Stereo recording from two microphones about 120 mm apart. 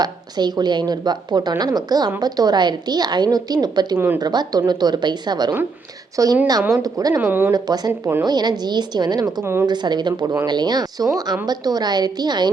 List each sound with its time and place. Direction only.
0.0 s a woman's voice: 35° right (ahead or behind)
3.9 s speech: 20° right (ahead or behind)
4.2 s a woman's voice: 35° right (ahead or behind)
7.2 s speech: 15° right (ahead or behind)
7.5 s a woman's voice: 35° right (ahead or behind)
9.4 s speech: 20° right (ahead or behind)
9.6 s a woman's voice: 40° right (ahead or behind)